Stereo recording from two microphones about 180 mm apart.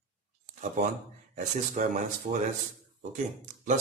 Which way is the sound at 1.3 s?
45° right (ahead or behind).